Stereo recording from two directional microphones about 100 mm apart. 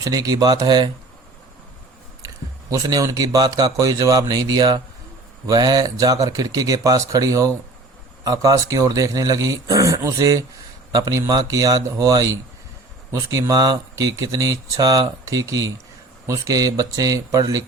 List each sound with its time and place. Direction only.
0.0 s speech: 40° right (ahead or behind)
2.2 s speech: 35° right (ahead or behind)